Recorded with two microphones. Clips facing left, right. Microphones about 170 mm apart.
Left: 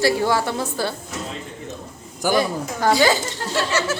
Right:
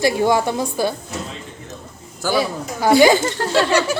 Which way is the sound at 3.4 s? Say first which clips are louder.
Right 6 dB; 85° right.